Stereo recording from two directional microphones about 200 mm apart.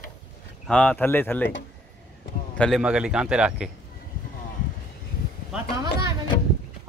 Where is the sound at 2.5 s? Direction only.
5° left (ahead or behind).